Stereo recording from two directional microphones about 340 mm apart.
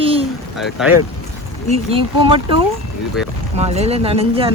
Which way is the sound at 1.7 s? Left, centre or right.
Centre.